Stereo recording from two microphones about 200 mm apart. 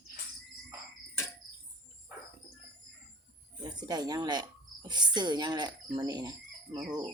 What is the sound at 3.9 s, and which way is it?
Speech, 20° right (ahead or behind).